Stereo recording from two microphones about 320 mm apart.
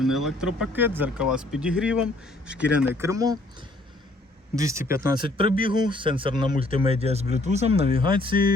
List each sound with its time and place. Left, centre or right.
0.0 s speech: centre
4.5 s speech: centre